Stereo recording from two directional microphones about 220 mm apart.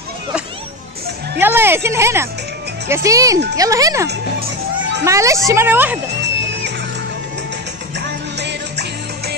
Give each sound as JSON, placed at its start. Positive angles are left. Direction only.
{"t": 1.4, "sound": "speech", "side_deg": -10}
{"t": 6.4, "sound": "music", "side_deg": -55}
{"t": 8.4, "sound": "music", "side_deg": -50}